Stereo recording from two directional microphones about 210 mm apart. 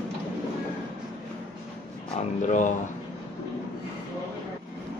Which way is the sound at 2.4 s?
35° left (ahead or behind).